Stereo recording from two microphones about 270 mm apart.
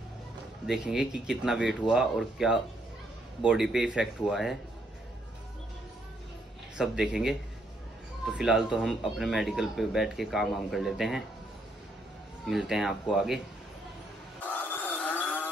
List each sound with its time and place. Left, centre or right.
0.7 s speech: centre
6.8 s speech: centre
12.4 s speech: centre
14.4 s a sound: centre